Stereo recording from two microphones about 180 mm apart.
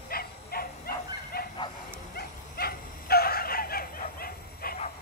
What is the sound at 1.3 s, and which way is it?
Bow-wow, 60° left (ahead or behind).